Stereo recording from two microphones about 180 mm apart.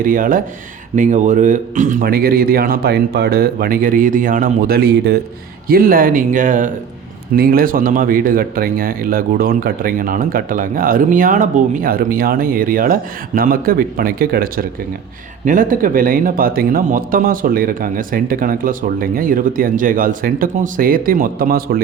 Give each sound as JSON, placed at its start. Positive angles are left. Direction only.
{"t": 0.0, "sound": "speech", "side_deg": -50}